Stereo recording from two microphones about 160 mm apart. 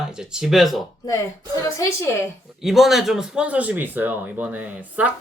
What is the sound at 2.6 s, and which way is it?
Speech, centre (ahead or behind).